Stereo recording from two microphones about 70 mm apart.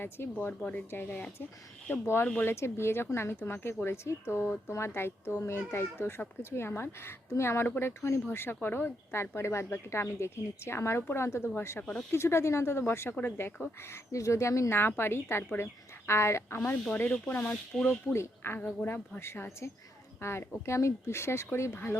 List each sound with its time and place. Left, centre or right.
0.0 s speech: left
2.2 s speech: left
2.5 s speech: left
11.8 s speech: centre
12.1 s speech: left
14.8 s speech: left
16.9 s speech: left
18.6 s speech: left